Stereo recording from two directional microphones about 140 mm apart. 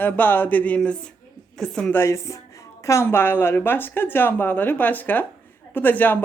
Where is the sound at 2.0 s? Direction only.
20° left (ahead or behind).